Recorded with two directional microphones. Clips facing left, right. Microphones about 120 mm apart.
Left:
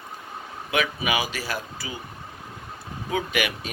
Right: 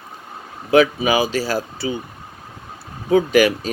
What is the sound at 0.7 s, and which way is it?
Speech, 30° right (ahead or behind).